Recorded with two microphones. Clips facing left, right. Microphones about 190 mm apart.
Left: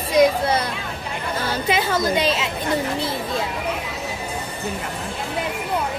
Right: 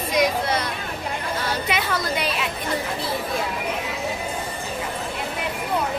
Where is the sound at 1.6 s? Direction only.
30° left (ahead or behind).